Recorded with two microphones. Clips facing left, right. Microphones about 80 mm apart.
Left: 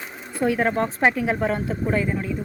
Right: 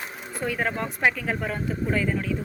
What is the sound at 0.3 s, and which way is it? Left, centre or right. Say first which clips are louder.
A woman's voice: left 6 dB; left.